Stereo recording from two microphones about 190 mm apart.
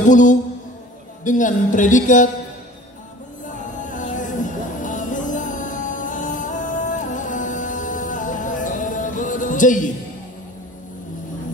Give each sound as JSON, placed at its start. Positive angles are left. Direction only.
{"t": 0.0, "sound": "speech", "side_deg": 40}
{"t": 3.4, "sound": "music", "side_deg": 40}